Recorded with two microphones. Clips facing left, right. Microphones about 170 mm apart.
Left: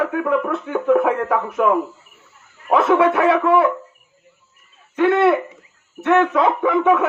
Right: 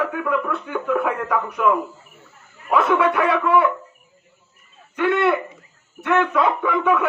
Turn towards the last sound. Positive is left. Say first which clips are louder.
# left 4 dB
turn(degrees=25)  # may be behind; listen again after turning